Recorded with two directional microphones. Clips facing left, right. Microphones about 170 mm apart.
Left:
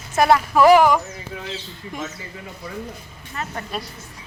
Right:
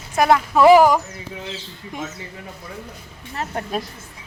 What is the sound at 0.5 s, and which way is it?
Speech, 20° right (ahead or behind).